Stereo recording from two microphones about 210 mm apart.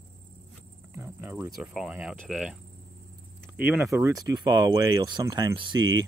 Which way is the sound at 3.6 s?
10° right (ahead or behind).